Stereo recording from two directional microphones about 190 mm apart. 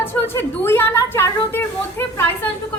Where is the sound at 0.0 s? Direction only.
10° left (ahead or behind).